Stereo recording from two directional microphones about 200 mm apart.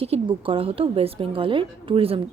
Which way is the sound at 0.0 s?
25° right (ahead or behind).